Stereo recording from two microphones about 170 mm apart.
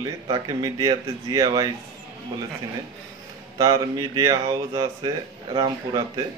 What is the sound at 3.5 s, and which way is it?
Speech, 20° right (ahead or behind).